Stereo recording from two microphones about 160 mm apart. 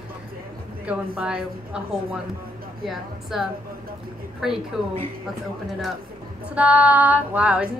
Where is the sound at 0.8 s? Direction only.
5° right (ahead or behind).